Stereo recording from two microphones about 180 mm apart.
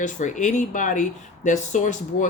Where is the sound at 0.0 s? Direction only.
45° left (ahead or behind).